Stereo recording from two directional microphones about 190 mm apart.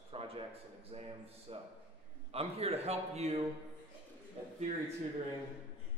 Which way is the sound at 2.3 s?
30° right (ahead or behind).